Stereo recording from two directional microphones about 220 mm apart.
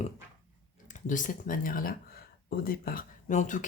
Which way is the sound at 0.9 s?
35° left (ahead or behind).